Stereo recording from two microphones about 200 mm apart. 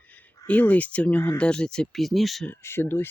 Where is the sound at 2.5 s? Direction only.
10° left (ahead or behind).